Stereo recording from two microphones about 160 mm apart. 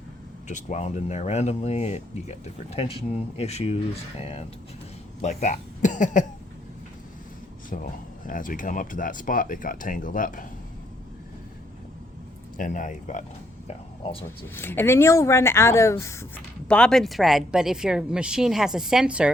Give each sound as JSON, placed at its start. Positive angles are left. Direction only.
{"t": 0.4, "sound": "speech", "side_deg": 50}
{"t": 7.7, "sound": "speech", "side_deg": 60}
{"t": 12.5, "sound": "speech", "side_deg": 55}
{"t": 14.0, "sound": "speech", "side_deg": 35}
{"t": 14.3, "sound": "speech", "side_deg": 15}
{"t": 16.6, "sound": "speech", "side_deg": 5}